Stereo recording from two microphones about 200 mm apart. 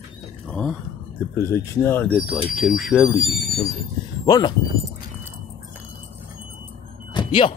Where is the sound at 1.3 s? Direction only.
15° left (ahead or behind).